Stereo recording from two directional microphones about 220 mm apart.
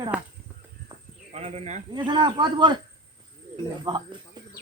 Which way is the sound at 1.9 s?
20° right (ahead or behind).